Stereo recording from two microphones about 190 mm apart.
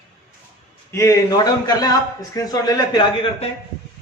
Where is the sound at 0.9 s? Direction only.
15° left (ahead or behind).